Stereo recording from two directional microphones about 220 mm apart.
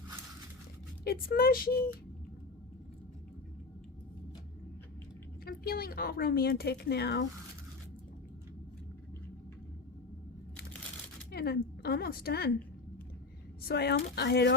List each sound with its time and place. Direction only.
1.0 s a woman's voice: 45° left (ahead or behind)
5.5 s a woman's voice: 45° left (ahead or behind)
11.3 s a woman's voice: 45° left (ahead or behind)
13.6 s a woman's voice: 45° left (ahead or behind)